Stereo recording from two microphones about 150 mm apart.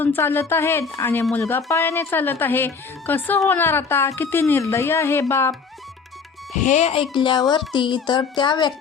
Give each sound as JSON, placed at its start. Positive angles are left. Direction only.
{"t": 0.0, "sound": "a woman's voice", "side_deg": 15}
{"t": 6.6, "sound": "speech", "side_deg": 50}
{"t": 7.1, "sound": "music", "side_deg": 30}